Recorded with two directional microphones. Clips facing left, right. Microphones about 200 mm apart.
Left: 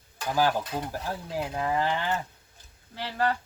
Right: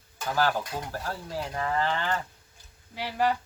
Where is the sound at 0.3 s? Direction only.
15° left (ahead or behind).